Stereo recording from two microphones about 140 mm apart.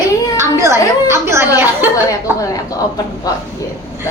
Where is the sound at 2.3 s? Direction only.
25° left (ahead or behind).